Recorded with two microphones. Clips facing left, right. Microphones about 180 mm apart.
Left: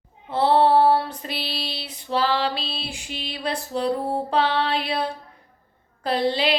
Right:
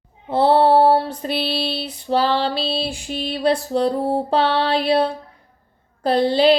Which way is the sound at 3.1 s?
50° right (ahead or behind).